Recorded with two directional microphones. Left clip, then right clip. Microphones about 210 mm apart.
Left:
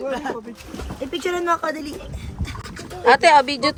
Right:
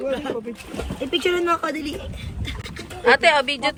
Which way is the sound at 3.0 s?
20° left (ahead or behind).